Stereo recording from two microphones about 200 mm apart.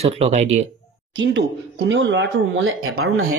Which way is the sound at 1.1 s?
65° right (ahead or behind).